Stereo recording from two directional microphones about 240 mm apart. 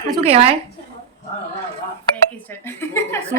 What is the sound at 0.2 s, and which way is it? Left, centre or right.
Speech, right.